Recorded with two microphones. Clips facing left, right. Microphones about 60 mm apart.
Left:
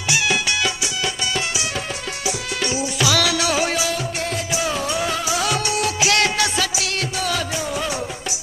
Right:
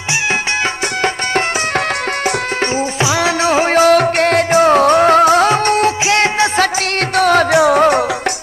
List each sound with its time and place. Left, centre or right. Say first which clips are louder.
3.0 s music: right 4 dB; right
7.2 s music: right 17 dB; right